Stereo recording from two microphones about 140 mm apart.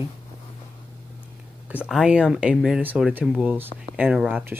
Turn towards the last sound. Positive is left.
turn(degrees=-10)  # may be behind; listen again after turning